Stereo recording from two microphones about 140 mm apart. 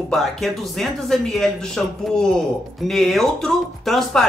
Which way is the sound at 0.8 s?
Centre (ahead or behind).